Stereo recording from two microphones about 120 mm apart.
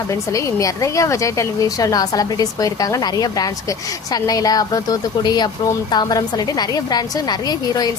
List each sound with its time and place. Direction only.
0.1 s a woman's voice: 25° left (ahead or behind)